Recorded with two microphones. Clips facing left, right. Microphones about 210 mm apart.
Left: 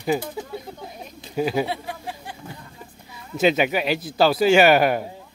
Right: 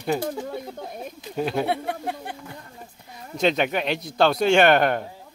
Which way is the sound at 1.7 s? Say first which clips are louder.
Right 4 dB; 60° right (ahead or behind).